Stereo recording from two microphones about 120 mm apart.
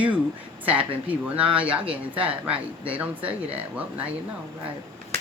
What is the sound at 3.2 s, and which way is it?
Speech, 55° right (ahead or behind).